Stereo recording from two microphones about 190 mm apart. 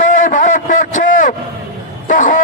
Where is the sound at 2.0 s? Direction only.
45° left (ahead or behind).